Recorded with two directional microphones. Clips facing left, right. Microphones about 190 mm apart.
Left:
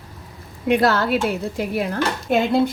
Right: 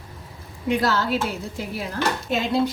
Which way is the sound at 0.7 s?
60° left (ahead or behind).